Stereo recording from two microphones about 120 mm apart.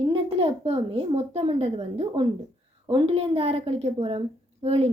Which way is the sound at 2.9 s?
50° right (ahead or behind).